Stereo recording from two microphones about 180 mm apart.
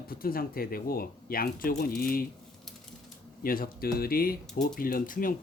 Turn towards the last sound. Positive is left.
turn(degrees=50)  # may be behind; listen again after turning